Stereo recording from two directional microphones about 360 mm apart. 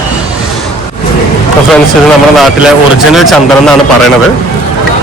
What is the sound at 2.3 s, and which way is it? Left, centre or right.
A man's voice, centre.